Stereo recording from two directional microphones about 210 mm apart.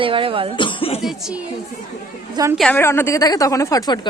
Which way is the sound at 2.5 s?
5° left (ahead or behind).